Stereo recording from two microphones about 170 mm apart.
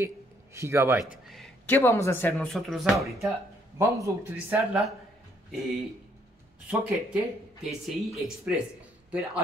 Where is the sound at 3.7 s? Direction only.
15° right (ahead or behind).